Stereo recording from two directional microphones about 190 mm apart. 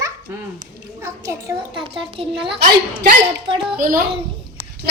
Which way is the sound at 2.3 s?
5° right (ahead or behind).